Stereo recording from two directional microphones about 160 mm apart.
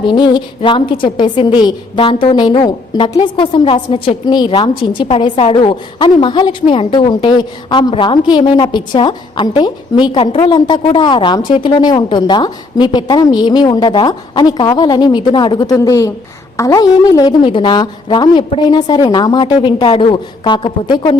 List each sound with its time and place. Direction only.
0.1 s a woman's voice: 30° left (ahead or behind)
3.1 s a woman's voice: 35° left (ahead or behind)